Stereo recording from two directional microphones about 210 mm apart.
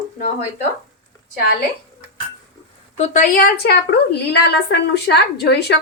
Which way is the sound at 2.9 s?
35° left (ahead or behind).